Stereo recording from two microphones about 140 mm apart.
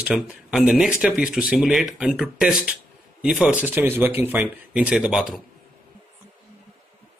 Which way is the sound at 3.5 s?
15° right (ahead or behind).